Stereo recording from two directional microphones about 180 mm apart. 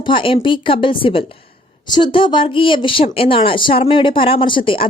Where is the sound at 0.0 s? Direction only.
30° left (ahead or behind).